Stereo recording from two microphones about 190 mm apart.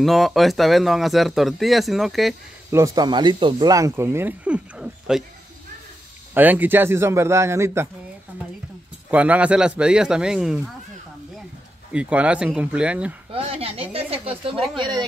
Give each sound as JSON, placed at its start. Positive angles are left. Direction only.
{"t": 0.0, "sound": "speech", "side_deg": 0}
{"t": 2.7, "sound": "speech", "side_deg": -15}
{"t": 6.3, "sound": "speech", "side_deg": -10}
{"t": 9.1, "sound": "speech", "side_deg": -5}
{"t": 11.9, "sound": "speech", "side_deg": -5}
{"t": 13.3, "sound": "a sound", "side_deg": -30}
{"t": 14.8, "sound": "a woman's voice", "side_deg": -20}